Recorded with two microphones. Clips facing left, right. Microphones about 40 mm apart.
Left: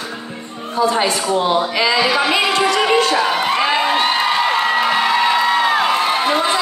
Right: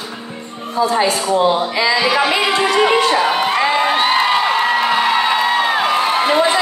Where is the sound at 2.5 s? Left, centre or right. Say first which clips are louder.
Right 1 dB; right.